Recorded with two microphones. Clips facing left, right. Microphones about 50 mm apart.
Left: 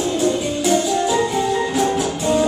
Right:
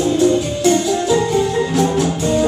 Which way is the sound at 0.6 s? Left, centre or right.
Centre.